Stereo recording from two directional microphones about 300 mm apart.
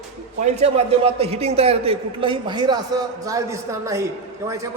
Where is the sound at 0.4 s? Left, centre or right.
Right.